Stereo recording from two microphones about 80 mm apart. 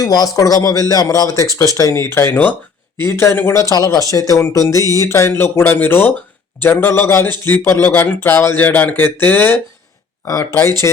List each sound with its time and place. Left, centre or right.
0.0 s speech: left
3.0 s speech: left
10.6 s speech: left